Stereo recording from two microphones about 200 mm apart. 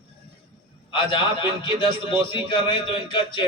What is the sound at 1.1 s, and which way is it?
A man's voice, 25° left (ahead or behind).